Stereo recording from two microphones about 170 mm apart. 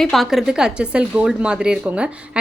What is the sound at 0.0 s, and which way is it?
A woman's voice, centre (ahead or behind).